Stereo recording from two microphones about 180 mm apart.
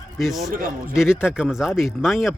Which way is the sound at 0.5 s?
50° right (ahead or behind).